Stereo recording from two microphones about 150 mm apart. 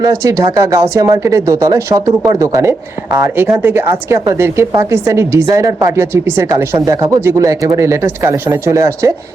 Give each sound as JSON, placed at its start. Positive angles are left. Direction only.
{"t": 0.0, "sound": "speech", "side_deg": -20}